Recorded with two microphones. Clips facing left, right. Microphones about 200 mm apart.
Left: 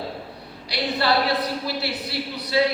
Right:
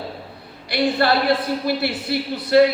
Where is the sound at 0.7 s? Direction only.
50° right (ahead or behind).